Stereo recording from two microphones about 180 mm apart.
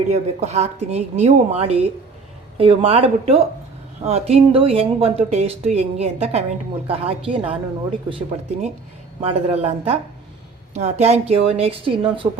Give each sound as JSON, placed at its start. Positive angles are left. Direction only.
{"t": 0.1, "sound": "speech", "side_deg": -35}